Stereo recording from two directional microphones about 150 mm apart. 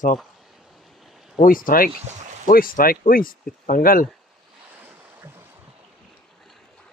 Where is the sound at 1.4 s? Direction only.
70° left (ahead or behind).